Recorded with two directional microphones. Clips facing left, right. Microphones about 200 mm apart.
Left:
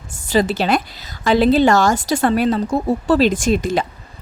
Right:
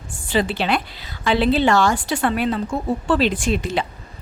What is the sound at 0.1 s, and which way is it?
A woman's voice, 40° left (ahead or behind).